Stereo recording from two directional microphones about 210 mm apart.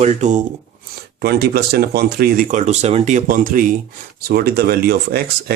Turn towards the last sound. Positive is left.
turn(degrees=-50)  # may be behind; listen again after turning